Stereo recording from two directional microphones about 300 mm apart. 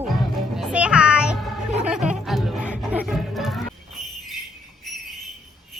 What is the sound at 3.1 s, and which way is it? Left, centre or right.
Music, centre.